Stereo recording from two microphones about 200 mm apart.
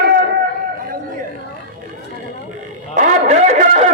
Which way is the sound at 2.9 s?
40° right (ahead or behind).